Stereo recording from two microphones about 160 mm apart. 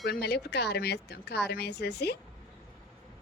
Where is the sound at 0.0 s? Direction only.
90° left.